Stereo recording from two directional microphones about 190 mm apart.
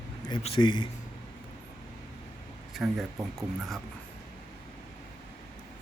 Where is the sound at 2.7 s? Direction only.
Centre (ahead or behind).